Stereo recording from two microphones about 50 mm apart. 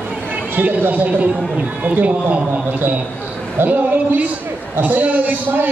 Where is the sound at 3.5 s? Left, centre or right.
Right.